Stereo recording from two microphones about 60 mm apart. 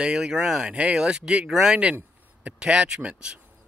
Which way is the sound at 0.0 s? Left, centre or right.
Centre.